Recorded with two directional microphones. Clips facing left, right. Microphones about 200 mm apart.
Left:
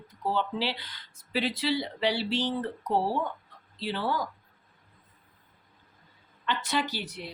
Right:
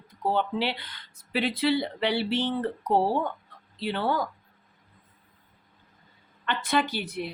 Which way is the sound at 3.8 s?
60° right (ahead or behind).